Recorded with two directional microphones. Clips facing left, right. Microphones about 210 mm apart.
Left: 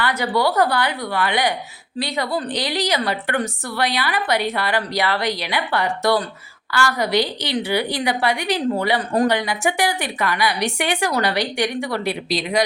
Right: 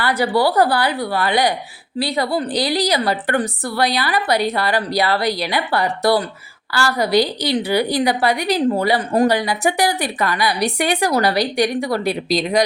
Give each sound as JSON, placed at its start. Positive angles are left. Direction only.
{"t": 0.0, "sound": "a woman's voice", "side_deg": -30}